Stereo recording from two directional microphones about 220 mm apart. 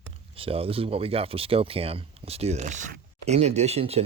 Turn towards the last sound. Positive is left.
turn(degrees=-30)  # may be behind; listen again after turning